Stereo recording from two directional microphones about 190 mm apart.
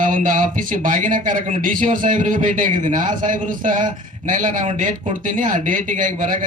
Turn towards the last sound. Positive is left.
turn(degrees=-45)  # may be behind; listen again after turning